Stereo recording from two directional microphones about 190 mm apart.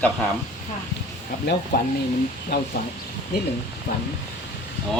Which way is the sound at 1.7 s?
55° left (ahead or behind).